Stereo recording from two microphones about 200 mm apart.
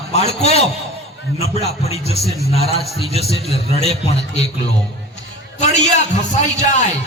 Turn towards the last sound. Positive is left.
turn(degrees=35)  # may be behind; listen again after turning